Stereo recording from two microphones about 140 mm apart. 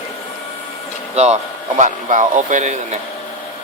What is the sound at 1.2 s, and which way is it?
Speech, 50° right (ahead or behind).